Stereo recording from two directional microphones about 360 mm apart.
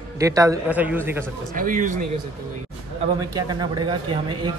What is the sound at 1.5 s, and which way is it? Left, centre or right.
Speech, right.